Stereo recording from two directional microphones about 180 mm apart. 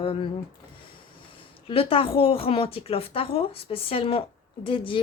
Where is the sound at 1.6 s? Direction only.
30° left (ahead or behind).